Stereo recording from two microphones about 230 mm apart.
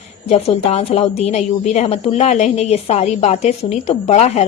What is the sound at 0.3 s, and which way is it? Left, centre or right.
A woman's voice, left.